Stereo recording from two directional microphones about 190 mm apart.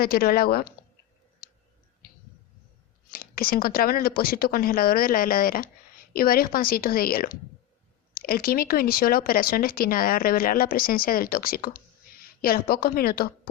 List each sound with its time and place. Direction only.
0.0 s speech: 50° left (ahead or behind)
1.4 s clicking: 50° left (ahead or behind)
3.1 s speech: 50° left (ahead or behind)